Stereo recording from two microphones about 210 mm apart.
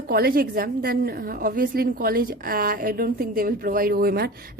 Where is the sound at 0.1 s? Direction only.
45° right (ahead or behind).